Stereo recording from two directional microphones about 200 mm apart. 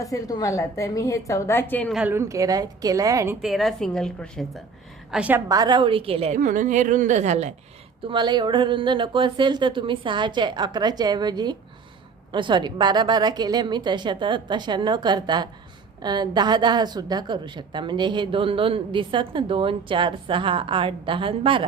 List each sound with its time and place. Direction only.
0.0 s a woman's voice: 15° left (ahead or behind)
2.0 s a woman's voice: 10° right (ahead or behind)
3.4 s a woman's voice: centre (ahead or behind)
5.5 s a woman's voice: 20° right (ahead or behind); by 7.5 s 35° right (ahead or behind)
8.0 s a woman's voice: 25° right (ahead or behind)